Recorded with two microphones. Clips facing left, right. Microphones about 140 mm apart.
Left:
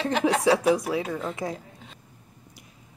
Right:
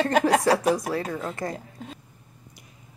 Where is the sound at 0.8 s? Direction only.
5° left (ahead or behind).